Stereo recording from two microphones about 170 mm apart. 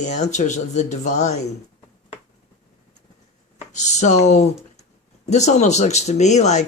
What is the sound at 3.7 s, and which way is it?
Speech, 45° left (ahead or behind).